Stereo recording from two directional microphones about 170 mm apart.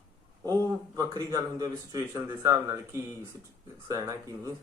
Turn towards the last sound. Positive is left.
turn(degrees=-20)  # may be behind; listen again after turning